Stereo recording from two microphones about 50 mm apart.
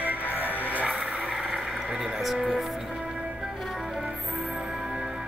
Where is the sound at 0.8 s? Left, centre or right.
Right.